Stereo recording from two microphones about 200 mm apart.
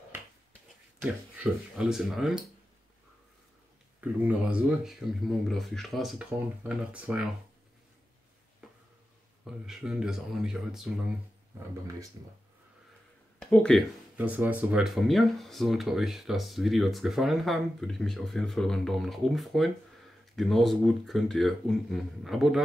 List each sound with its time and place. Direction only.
0.1 s a sound: 10° right (ahead or behind)
1.4 s speech: 5° right (ahead or behind)
4.0 s speech: 5° right (ahead or behind)
9.4 s speech: centre (ahead or behind)
13.4 s speech: 5° left (ahead or behind)
14.1 s speech: 10° right (ahead or behind)